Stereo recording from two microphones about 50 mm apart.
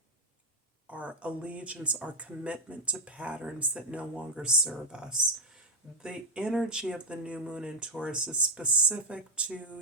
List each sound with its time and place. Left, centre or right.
0.9 s speech: right